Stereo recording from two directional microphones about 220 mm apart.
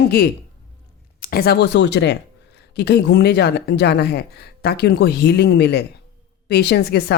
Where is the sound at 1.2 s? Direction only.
45° left (ahead or behind).